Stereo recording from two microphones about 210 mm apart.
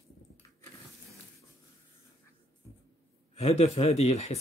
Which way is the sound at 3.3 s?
30° left (ahead or behind).